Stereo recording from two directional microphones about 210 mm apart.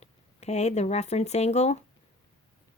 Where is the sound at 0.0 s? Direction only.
30° left (ahead or behind).